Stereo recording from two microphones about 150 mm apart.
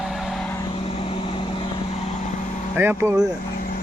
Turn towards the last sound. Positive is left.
turn(degrees=-15)  # may be behind; listen again after turning